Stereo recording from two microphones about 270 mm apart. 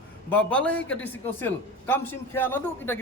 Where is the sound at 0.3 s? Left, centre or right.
Centre.